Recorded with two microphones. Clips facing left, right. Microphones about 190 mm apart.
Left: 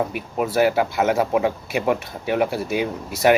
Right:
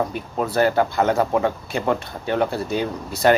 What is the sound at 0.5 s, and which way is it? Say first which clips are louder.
Speech: even; 5° left (ahead or behind).